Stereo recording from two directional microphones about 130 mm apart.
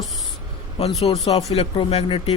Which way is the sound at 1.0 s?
50° left (ahead or behind).